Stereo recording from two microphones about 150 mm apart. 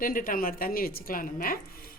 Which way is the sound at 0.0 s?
70° left (ahead or behind).